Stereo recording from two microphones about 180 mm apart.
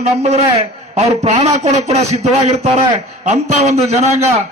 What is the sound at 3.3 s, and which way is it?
A man's voice, 35° right (ahead or behind).